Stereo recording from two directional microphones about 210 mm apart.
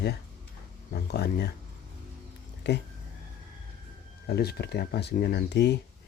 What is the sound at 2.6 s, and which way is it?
Speech, 55° left (ahead or behind).